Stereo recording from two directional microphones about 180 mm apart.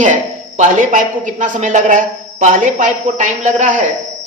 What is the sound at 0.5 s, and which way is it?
A man's voice, 40° right (ahead or behind).